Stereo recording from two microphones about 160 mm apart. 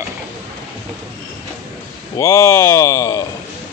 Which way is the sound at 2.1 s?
20° left (ahead or behind).